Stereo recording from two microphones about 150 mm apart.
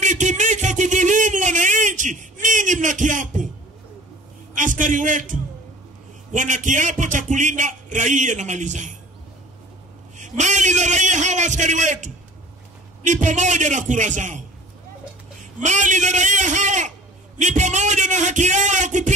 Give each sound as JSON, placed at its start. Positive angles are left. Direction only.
{"t": 0.0, "sound": "a sound", "side_deg": -55}
{"t": 4.6, "sound": "music", "side_deg": -60}
{"t": 10.1, "sound": "a man's voice", "side_deg": -55}
{"t": 13.0, "sound": "music", "side_deg": -55}
{"t": 15.6, "sound": "music", "side_deg": -55}